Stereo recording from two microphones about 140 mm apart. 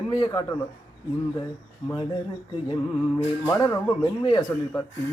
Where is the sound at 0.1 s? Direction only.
35° left (ahead or behind).